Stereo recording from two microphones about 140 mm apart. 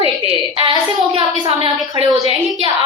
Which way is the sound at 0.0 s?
35° right (ahead or behind).